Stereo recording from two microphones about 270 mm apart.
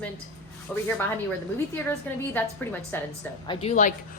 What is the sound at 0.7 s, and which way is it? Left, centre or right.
Speech, centre.